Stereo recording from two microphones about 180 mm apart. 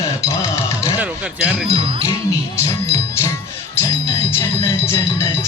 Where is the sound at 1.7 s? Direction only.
30° right (ahead or behind).